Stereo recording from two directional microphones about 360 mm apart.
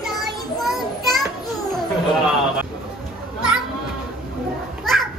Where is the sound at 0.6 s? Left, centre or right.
Centre.